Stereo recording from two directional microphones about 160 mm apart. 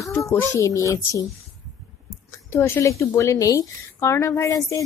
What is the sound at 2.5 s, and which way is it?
A woman's voice, 15° left (ahead or behind).